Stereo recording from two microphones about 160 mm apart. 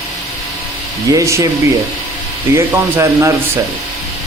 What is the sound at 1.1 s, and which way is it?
Speech, 20° right (ahead or behind).